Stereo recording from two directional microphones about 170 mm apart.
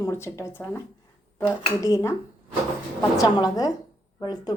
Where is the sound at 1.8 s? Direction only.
20° left (ahead or behind).